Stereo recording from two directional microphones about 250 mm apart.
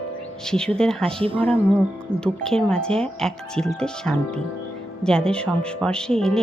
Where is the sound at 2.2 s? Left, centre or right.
Centre.